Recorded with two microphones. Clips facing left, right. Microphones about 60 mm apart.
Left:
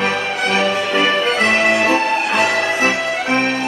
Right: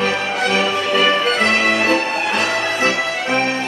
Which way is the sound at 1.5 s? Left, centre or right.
Centre.